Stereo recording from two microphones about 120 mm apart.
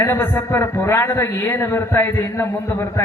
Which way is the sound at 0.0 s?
20° left (ahead or behind).